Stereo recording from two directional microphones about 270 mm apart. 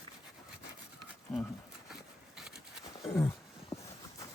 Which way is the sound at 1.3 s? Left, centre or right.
Centre.